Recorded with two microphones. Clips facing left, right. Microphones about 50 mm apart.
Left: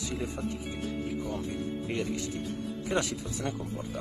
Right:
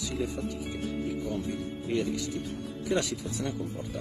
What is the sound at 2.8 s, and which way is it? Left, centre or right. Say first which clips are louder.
Speech: right 2 dB; left.